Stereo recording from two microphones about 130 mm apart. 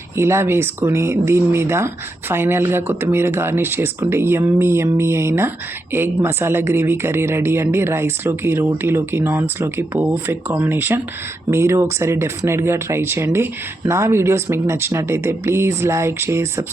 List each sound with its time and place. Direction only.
0.2 s speech: 20° right (ahead or behind)